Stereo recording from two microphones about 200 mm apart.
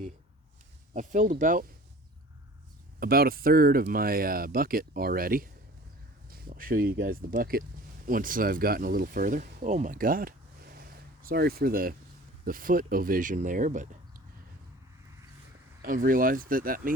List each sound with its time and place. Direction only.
0.9 s speech: 40° right (ahead or behind)
3.0 s speech: 50° right (ahead or behind)
15.8 s speech: 45° right (ahead or behind)